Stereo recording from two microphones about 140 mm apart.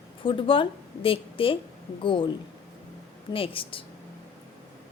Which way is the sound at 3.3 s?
40° left (ahead or behind).